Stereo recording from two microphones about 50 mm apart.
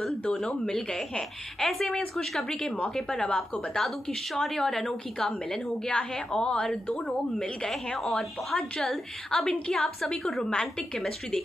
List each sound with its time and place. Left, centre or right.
0.4 s a woman's voice: centre
3.7 s a woman's voice: centre; by 7.0 s left
7.6 s a woman's voice: centre